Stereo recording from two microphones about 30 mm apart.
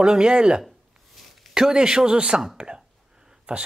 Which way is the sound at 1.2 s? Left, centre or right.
Centre.